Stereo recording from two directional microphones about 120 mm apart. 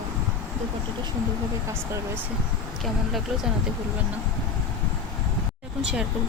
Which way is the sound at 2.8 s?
Centre (ahead or behind).